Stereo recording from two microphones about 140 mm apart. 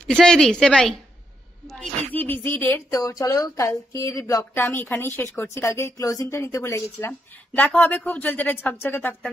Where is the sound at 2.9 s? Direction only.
25° left (ahead or behind).